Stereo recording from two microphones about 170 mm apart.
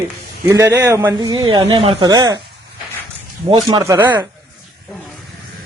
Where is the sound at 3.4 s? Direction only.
25° right (ahead or behind).